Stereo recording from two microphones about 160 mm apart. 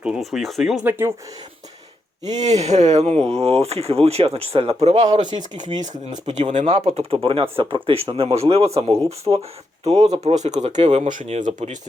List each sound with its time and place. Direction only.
0.0 s speech: centre (ahead or behind)
0.9 s speech: 15° right (ahead or behind)
2.4 s speech: 45° right (ahead or behind)
8.9 s speech: 20° right (ahead or behind)
9.8 s speech: 40° right (ahead or behind)